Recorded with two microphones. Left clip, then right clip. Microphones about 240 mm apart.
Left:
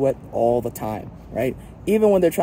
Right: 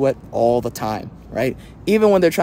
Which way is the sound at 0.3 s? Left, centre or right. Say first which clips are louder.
Right 3 dB; right.